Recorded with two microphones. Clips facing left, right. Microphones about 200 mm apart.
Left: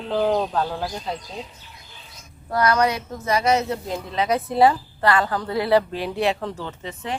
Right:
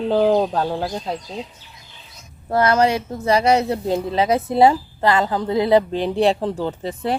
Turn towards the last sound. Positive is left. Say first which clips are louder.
# right 7 dB
turn(degrees=-35)  # may be behind; listen again after turning